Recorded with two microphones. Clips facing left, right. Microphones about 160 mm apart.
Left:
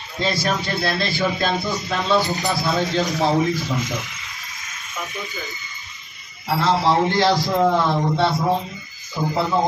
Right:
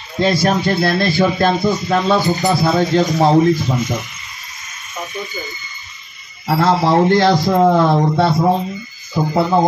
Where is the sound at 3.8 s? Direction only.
90° left.